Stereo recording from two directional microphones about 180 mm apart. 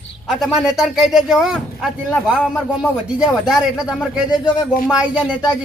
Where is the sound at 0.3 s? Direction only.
Centre (ahead or behind).